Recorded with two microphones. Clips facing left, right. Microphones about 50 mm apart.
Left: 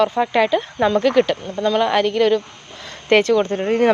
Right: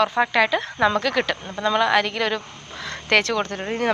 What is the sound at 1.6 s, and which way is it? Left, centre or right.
Speech, centre.